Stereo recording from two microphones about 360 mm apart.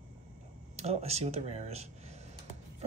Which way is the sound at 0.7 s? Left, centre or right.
Centre.